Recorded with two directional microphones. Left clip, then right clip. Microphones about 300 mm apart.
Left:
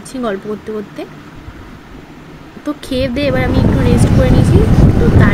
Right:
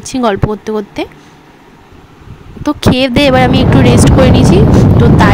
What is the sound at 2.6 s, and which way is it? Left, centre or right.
Speech, right.